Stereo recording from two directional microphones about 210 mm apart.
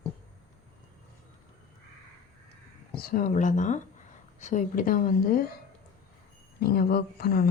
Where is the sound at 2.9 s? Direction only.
45° left (ahead or behind).